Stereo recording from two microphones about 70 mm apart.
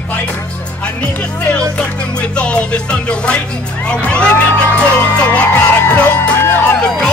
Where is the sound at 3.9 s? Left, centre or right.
Centre.